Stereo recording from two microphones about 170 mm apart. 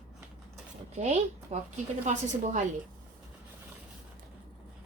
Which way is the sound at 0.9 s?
45° right (ahead or behind).